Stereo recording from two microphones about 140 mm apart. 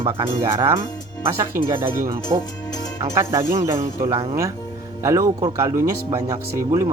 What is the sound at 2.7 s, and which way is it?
Music, 30° left (ahead or behind).